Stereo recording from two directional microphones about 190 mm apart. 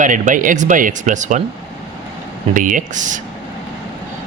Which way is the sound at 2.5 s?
45° right (ahead or behind).